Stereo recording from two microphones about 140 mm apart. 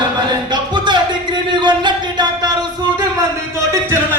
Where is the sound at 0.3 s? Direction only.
30° right (ahead or behind).